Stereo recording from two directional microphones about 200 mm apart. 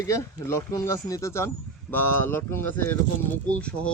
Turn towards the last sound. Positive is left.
turn(degrees=5)  # may be behind; listen again after turning